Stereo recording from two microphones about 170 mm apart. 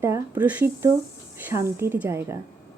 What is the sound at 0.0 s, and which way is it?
A woman's voice, 10° right (ahead or behind).